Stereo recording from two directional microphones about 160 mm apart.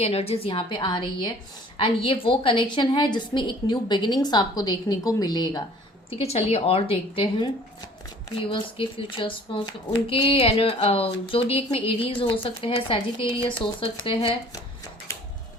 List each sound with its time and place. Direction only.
0.0 s a woman's voice: 40° left (ahead or behind)
6.1 s speech: 40° left (ahead or behind)